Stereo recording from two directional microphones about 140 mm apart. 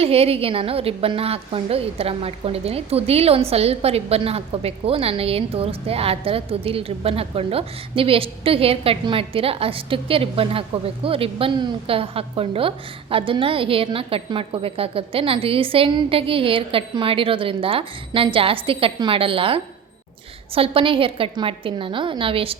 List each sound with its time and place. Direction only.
0.0 s a woman's voice: 45° right (ahead or behind)